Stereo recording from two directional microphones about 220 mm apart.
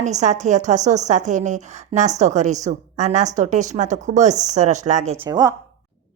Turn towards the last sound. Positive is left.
turn(degrees=-15)  # may be behind; listen again after turning